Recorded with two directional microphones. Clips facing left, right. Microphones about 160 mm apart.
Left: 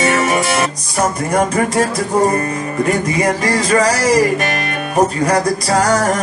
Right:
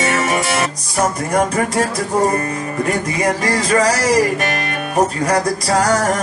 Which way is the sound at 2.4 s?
15° left (ahead or behind).